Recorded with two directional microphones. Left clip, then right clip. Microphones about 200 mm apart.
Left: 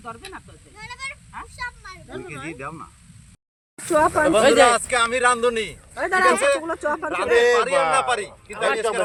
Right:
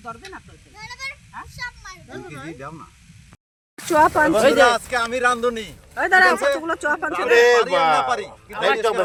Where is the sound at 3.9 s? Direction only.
55° right (ahead or behind).